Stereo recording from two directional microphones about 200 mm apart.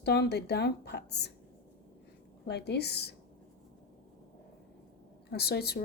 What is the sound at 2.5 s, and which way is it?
Speech, 55° left (ahead or behind).